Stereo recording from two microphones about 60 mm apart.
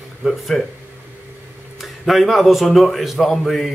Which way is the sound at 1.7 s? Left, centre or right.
Centre.